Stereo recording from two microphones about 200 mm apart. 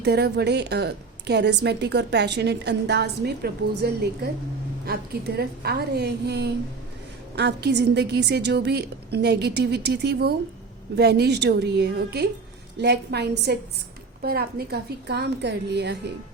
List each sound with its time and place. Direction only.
0.0 s a woman's voice: 55° right (ahead or behind)
5.4 s a woman's voice: 50° right (ahead or behind)